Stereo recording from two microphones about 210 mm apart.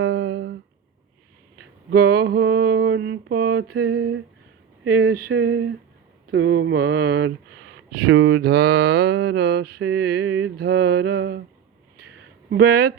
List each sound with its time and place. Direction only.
0.0 s humming: 55° right (ahead or behind)
1.9 s speech: 50° right (ahead or behind)
3.9 s a sound: 65° right (ahead or behind)
5.3 s speech: 70° right (ahead or behind)
6.7 s speech: 50° right (ahead or behind)
12.5 s speech: 50° right (ahead or behind)